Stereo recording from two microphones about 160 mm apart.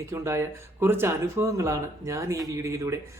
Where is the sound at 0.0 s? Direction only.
15° right (ahead or behind).